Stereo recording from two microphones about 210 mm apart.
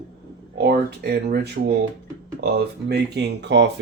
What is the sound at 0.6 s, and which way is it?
Speech, 50° right (ahead or behind).